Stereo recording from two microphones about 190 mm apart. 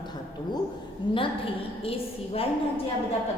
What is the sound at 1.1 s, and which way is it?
Speech, 30° left (ahead or behind).